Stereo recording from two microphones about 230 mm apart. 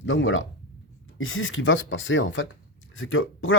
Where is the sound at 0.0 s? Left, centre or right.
Left.